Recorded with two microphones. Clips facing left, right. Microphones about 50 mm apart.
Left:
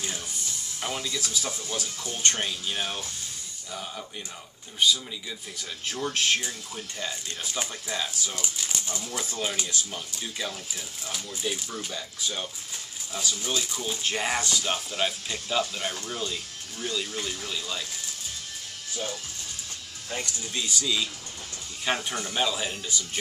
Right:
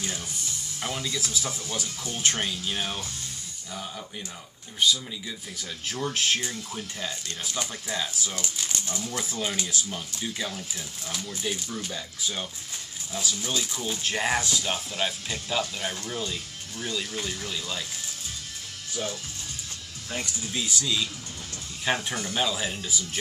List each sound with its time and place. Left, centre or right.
0.7 s speech: centre
6.0 s speech: centre
7.2 s speech: centre
7.9 s speech: centre
20.1 s speech: centre